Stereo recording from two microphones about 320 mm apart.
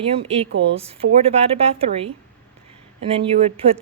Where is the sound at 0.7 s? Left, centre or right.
Centre.